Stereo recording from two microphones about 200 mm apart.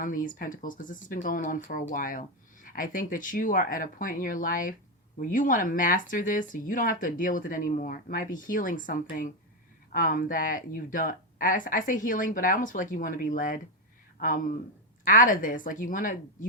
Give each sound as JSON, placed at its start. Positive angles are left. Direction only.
{"t": 0.0, "sound": "speech", "side_deg": 40}